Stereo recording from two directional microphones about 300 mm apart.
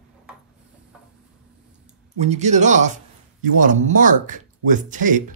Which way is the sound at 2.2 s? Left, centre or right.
Right.